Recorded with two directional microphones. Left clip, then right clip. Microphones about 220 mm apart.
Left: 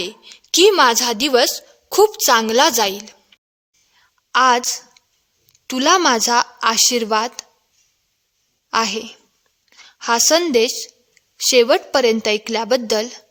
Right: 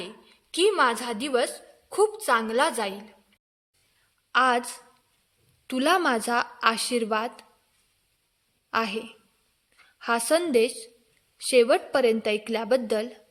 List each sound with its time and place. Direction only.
0.0 s a woman's voice: 50° left (ahead or behind)
4.3 s a woman's voice: 25° left (ahead or behind)
8.7 s a woman's voice: 25° left (ahead or behind)